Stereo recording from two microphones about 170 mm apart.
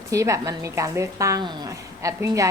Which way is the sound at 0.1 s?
20° right (ahead or behind).